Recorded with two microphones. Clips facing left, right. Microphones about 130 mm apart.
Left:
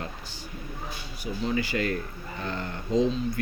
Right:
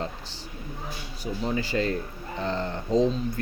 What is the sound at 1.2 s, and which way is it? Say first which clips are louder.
Speech: even; 35° right (ahead or behind).